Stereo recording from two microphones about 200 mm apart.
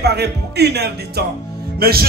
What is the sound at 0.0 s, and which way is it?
A man's voice, 55° right (ahead or behind).